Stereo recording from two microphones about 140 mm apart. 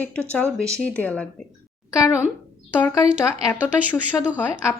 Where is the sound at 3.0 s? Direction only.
45° right (ahead or behind).